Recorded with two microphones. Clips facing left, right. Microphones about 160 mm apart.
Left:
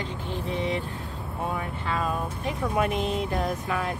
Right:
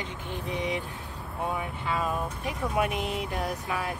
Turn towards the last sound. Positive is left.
turn(degrees=-5)  # may be behind; listen again after turning